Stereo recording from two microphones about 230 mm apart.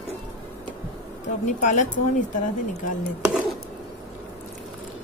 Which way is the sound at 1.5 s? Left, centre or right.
Left.